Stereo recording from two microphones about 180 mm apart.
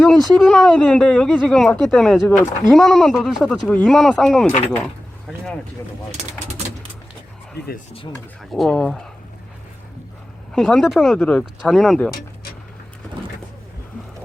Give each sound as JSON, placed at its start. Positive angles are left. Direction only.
{"t": 0.0, "sound": "speech", "side_deg": 5}
{"t": 7.6, "sound": "speech", "side_deg": 65}
{"t": 8.1, "sound": "speech", "side_deg": 5}
{"t": 10.5, "sound": "speech", "side_deg": 5}